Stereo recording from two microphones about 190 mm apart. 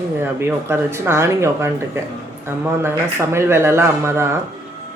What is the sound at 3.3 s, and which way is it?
Speech, 15° right (ahead or behind).